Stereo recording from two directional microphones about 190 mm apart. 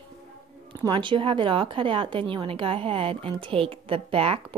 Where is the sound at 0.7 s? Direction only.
25° right (ahead or behind).